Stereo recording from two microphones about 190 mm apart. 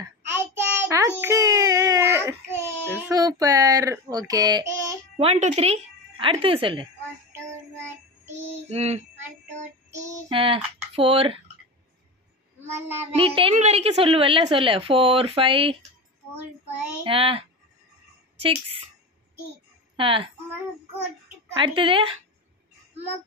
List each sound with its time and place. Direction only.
0.0 s child singing: 10° right (ahead or behind)
5.1 s speech: 35° right (ahead or behind)
8.6 s a sound: 35° right (ahead or behind)
10.3 s speech: 30° right (ahead or behind)
13.1 s a woman's voice: 30° right (ahead or behind)
17.0 s a woman's voice: 30° right (ahead or behind)
20.0 s a woman's voice: 25° right (ahead or behind)
21.5 s a woman's voice: 25° right (ahead or behind)